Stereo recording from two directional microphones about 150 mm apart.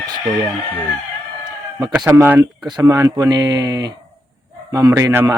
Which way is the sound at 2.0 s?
15° right (ahead or behind).